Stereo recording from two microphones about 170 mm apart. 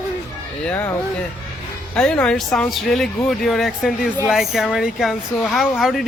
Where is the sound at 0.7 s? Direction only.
10° left (ahead or behind).